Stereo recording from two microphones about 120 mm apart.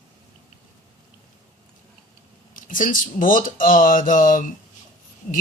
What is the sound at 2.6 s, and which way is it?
Speech, 90° left.